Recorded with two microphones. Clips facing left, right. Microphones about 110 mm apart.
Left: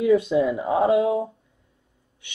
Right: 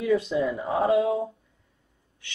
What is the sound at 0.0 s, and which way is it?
Speech, 20° left (ahead or behind).